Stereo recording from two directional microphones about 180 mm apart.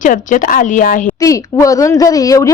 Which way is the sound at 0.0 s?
45° left (ahead or behind).